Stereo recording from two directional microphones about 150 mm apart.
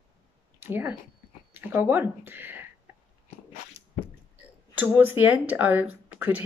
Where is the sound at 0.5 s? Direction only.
15° right (ahead or behind).